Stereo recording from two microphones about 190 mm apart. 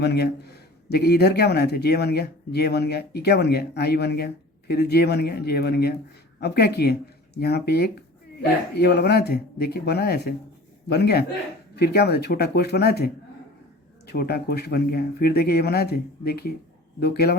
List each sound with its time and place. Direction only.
0.0 s speech: 60° left (ahead or behind)
14.1 s speech: 55° left (ahead or behind)